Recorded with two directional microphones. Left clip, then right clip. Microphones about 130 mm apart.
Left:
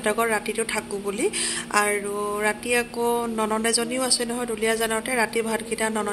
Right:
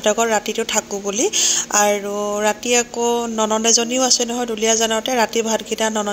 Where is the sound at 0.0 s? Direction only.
20° right (ahead or behind).